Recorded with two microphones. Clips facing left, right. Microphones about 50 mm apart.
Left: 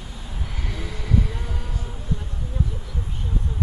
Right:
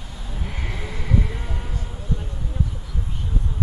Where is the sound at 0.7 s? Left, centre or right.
Right.